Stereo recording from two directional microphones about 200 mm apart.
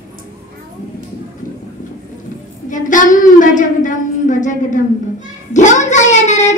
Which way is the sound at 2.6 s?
40° left (ahead or behind).